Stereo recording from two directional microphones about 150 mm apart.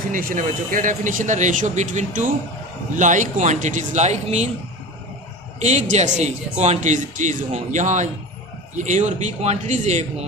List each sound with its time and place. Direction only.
0.1 s speech: 70° right (ahead or behind); by 4.4 s 50° right (ahead or behind)
5.5 s a man's voice: 50° right (ahead or behind)